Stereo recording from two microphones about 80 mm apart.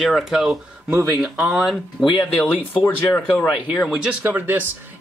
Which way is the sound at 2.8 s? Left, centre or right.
Left.